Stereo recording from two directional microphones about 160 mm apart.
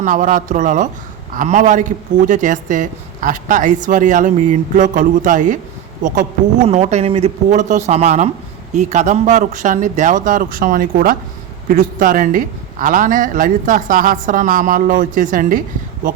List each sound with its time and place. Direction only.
0.0 s speech: 50° right (ahead or behind)
6.7 s a woman's voice: 45° right (ahead or behind)